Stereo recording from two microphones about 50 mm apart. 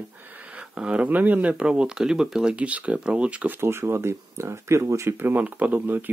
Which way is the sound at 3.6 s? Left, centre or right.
Right.